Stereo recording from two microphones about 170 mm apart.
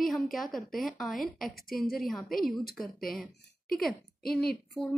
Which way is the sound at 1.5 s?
60° left (ahead or behind).